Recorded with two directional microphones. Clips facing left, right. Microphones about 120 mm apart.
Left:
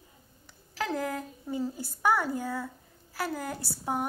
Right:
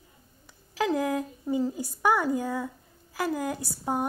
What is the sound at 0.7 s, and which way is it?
A woman's voice, 10° right (ahead or behind).